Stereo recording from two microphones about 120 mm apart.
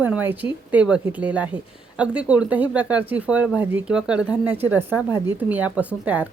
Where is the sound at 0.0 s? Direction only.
15° right (ahead or behind).